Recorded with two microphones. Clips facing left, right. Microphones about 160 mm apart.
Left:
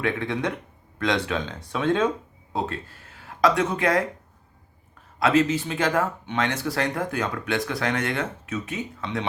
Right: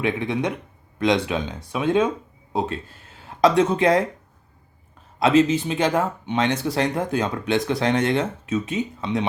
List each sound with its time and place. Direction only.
0.0 s speech: 15° right (ahead or behind)
5.2 s speech: 20° right (ahead or behind)